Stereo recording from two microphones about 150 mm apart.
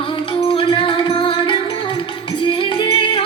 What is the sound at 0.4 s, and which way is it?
Music, 35° left (ahead or behind).